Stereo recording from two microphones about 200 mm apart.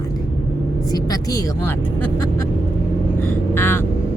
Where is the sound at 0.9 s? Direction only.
20° left (ahead or behind).